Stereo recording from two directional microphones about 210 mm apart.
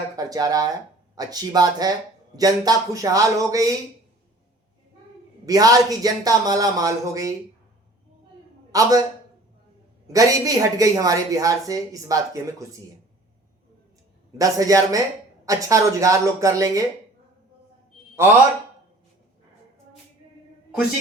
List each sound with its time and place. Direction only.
0.2 s speech: 15° right (ahead or behind)
5.5 s speech: 15° right (ahead or behind)
8.7 s speech: 15° right (ahead or behind)
10.1 s speech: 15° right (ahead or behind)
14.3 s speech: 15° right (ahead or behind)